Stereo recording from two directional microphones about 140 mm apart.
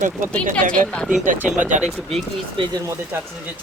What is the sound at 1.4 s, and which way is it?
Speech, 10° right (ahead or behind).